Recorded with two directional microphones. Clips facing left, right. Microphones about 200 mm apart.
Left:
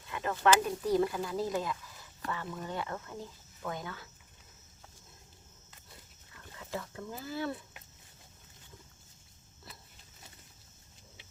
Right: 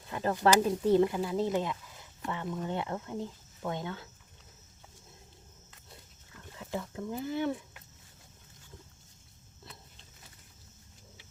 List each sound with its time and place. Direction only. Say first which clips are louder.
0.1 s a sound: right 4 dB; 35° right (ahead or behind)
0.4 s speech: right 2 dB; 30° right (ahead or behind)
6.6 s speech: right 3 dB; 20° right (ahead or behind)